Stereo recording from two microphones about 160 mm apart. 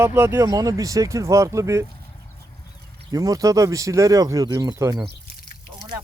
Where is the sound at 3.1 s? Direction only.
20° right (ahead or behind).